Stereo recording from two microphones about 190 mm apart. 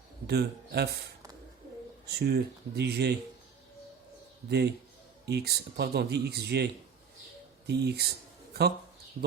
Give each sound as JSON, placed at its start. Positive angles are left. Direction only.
{"t": 0.3, "sound": "speech", "side_deg": -60}
{"t": 2.0, "sound": "speech", "side_deg": -60}
{"t": 4.4, "sound": "speech", "side_deg": -60}
{"t": 7.7, "sound": "speech", "side_deg": -60}